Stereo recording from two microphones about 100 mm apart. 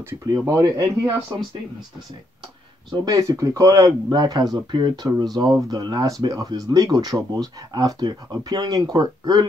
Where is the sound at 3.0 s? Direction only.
35° right (ahead or behind).